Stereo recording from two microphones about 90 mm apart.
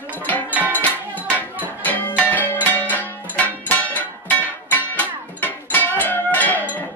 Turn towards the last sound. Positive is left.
turn(degrees=20)  # may be behind; listen again after turning